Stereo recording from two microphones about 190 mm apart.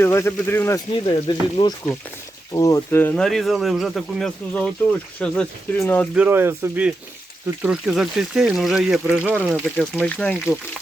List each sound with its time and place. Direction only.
0.0 s speech: 15° left (ahead or behind)
1.0 s speech: 25° left (ahead or behind); by 6.1 s 10° left (ahead or behind)
6.1 s speech: 10° right (ahead or behind)
9.6 s speech: 5° left (ahead or behind)